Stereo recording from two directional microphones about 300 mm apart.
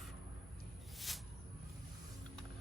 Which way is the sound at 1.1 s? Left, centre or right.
Centre.